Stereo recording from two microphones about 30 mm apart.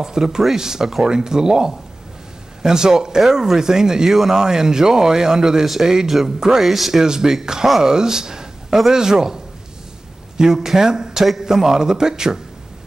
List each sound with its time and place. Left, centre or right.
0.0 s speech: centre
4.1 s a man's voice: centre
4.4 s a man's voice: centre
7.0 s a man's voice: centre